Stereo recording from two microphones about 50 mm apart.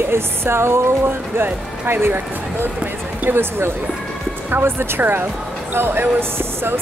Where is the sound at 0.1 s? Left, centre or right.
Right.